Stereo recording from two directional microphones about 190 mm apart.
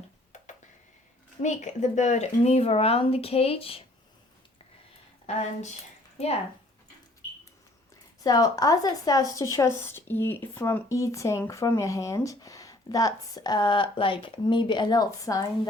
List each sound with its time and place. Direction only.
1.4 s speech: 40° left (ahead or behind)
5.2 s speech: 35° left (ahead or behind)
8.2 s speech: 20° left (ahead or behind)